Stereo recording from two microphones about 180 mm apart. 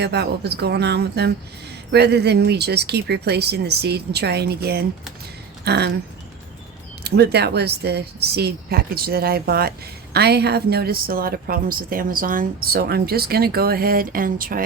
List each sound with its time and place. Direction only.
0.0 s speech: 65° right (ahead or behind)
7.0 s speech: 65° right (ahead or behind)